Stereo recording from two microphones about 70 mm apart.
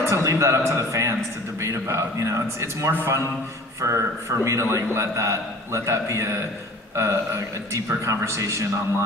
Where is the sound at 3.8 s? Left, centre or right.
Right.